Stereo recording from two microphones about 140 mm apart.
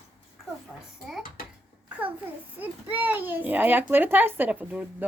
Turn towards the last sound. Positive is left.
turn(degrees=-10)  # may be behind; listen again after turning